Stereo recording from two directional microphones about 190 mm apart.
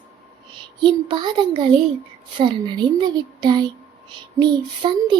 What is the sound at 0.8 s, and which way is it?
Speech, 25° right (ahead or behind).